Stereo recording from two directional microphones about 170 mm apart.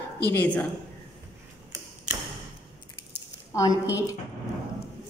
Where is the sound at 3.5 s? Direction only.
20° left (ahead or behind).